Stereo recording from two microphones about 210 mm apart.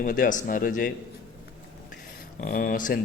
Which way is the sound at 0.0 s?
40° left (ahead or behind).